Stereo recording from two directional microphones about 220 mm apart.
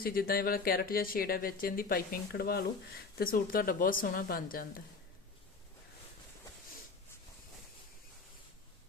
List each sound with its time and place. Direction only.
0.0 s speech: 40° left (ahead or behind)